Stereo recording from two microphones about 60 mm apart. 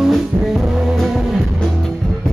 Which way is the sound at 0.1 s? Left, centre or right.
Centre.